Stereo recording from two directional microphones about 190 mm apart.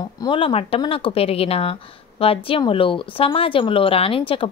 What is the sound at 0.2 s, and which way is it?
A woman's voice, 25° left (ahead or behind).